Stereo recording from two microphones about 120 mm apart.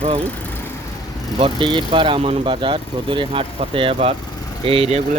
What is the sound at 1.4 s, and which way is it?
Speech, 45° right (ahead or behind).